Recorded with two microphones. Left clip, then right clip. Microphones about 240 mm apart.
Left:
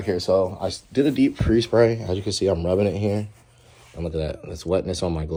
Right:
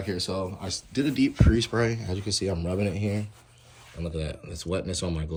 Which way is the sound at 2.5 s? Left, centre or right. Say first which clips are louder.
Left 9 dB; centre.